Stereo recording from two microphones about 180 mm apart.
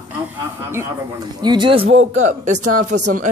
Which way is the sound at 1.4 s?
25° right (ahead or behind).